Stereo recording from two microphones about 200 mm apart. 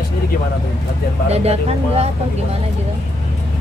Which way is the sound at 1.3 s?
30° right (ahead or behind).